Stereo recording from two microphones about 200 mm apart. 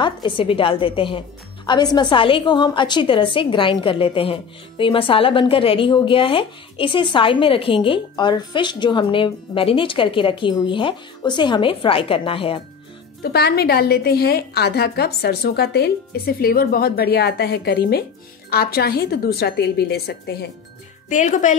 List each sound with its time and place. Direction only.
0.0 s a woman's voice: 25° left (ahead or behind)
13.2 s a woman's voice: 50° left (ahead or behind)
21.1 s speech: 40° left (ahead or behind)